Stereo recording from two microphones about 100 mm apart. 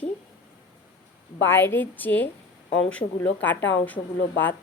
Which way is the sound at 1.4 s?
20° left (ahead or behind).